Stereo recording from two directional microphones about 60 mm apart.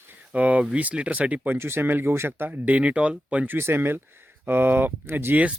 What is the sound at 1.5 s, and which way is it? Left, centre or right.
Speech, right.